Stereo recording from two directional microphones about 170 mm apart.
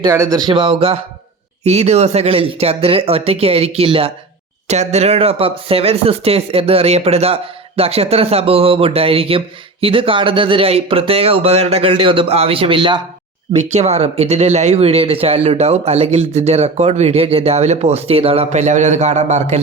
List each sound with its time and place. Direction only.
0.0 s speech: 20° right (ahead or behind)
13.6 s speech: 40° right (ahead or behind)